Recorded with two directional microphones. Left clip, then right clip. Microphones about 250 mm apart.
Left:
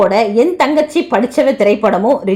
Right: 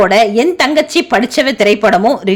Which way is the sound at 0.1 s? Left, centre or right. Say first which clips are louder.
Right 2 dB; right.